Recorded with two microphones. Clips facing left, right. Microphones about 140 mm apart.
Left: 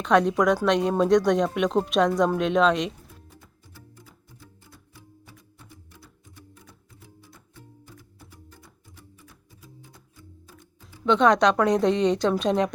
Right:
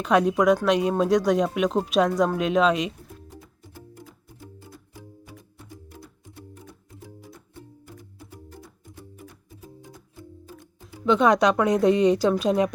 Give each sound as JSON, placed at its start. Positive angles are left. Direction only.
{"t": 0.0, "sound": "speech", "side_deg": -5}
{"t": 4.9, "sound": "music", "side_deg": -15}
{"t": 11.0, "sound": "speech", "side_deg": -5}